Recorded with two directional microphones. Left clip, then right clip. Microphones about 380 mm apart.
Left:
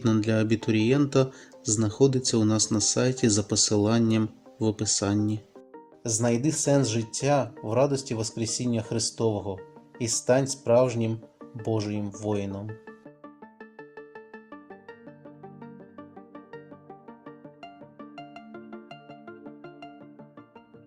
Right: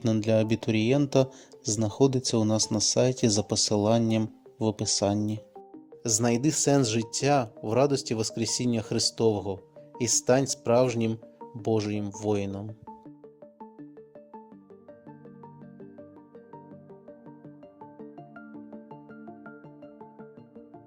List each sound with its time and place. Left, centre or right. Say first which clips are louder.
0.0 s speech: right 1 dB; centre